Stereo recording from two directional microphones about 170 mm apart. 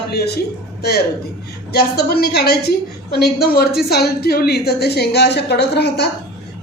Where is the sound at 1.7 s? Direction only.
70° left (ahead or behind).